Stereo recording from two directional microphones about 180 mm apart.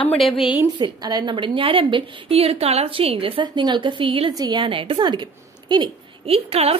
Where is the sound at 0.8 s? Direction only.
25° right (ahead or behind).